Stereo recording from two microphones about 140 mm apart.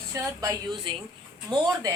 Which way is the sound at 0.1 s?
25° right (ahead or behind).